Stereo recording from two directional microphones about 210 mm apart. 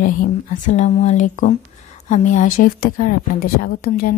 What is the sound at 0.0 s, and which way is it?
Speech, 40° left (ahead or behind).